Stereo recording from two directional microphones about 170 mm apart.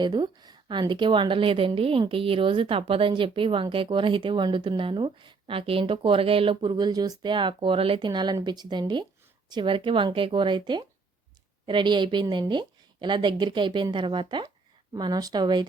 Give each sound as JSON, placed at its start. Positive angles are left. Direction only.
{"t": 0.0, "sound": "a woman's voice", "side_deg": -25}